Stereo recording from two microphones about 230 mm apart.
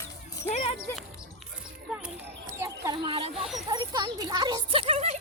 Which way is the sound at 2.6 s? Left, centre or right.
Centre.